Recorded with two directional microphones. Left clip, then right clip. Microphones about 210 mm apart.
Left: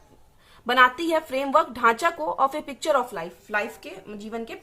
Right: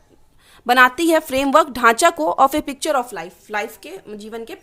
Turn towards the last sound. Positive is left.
turn(degrees=-45)  # may be behind; listen again after turning